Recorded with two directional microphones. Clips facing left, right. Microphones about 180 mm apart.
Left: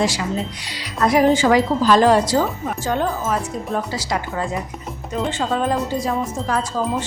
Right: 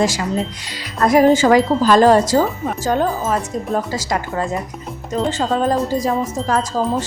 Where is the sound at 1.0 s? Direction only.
45° right (ahead or behind).